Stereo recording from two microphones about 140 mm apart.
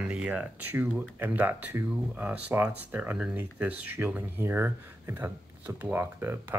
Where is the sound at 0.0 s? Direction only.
10° right (ahead or behind).